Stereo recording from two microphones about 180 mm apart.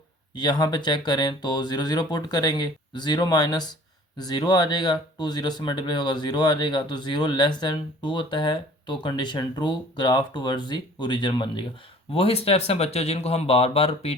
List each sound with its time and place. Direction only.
0.3 s speech: 25° left (ahead or behind)